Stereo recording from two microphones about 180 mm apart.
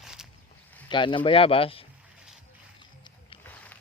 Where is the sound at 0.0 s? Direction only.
5° right (ahead or behind).